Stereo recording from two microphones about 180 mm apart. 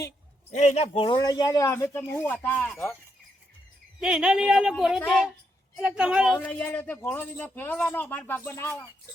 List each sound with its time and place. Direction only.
0.5 s speech: 40° left (ahead or behind); by 3.0 s 10° left (ahead or behind)
4.0 s speech: 5° right (ahead or behind)
6.3 s speech: 10° left (ahead or behind)